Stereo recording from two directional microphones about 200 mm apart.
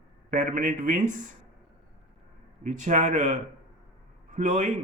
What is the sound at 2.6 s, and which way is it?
A man's voice, 40° right (ahead or behind).